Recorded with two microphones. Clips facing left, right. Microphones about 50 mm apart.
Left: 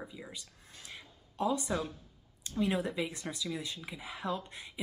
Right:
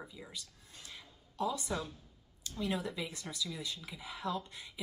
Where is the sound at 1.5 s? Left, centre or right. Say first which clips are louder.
Left 4 dB; centre.